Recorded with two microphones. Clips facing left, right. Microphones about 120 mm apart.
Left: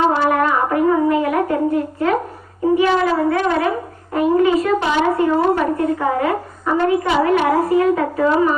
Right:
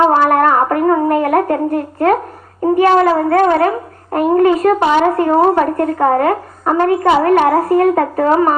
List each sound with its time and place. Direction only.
0.1 s humming: 50° right (ahead or behind)
2.7 s a woman's voice: 50° right (ahead or behind)